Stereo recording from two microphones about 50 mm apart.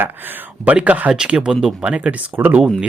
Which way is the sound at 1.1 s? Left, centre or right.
Centre.